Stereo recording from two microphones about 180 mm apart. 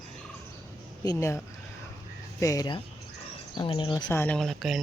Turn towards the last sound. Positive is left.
turn(degrees=0)  # may be behind; listen again after turning